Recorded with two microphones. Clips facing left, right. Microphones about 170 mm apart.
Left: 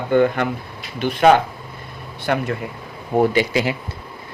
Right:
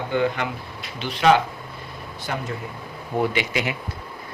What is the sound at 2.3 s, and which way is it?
Speech, 65° left (ahead or behind).